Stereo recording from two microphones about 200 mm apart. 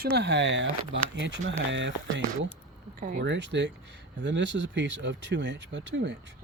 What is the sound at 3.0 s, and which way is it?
Speech, 45° right (ahead or behind).